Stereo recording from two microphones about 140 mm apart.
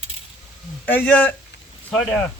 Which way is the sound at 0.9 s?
10° left (ahead or behind).